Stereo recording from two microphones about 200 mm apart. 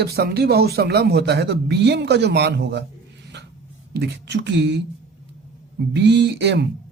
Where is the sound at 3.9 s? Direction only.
60° right (ahead or behind).